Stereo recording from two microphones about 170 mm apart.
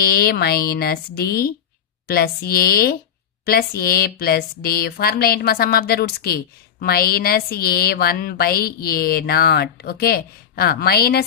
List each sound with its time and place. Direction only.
0.1 s speech: 65° left (ahead or behind)